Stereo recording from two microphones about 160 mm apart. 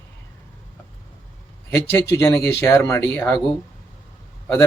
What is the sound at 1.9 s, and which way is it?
Speech, 15° left (ahead or behind).